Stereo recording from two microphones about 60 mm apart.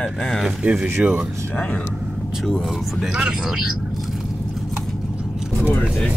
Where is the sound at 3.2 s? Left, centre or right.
Centre.